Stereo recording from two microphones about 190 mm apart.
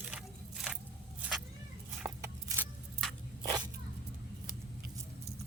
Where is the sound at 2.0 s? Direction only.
15° right (ahead or behind).